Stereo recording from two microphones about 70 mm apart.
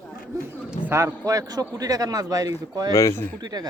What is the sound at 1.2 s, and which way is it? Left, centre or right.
Speech, right.